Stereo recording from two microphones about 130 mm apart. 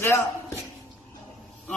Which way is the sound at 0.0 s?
20° left (ahead or behind).